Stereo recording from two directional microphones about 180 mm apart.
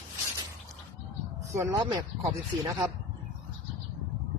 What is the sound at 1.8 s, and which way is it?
Speech, 20° right (ahead or behind).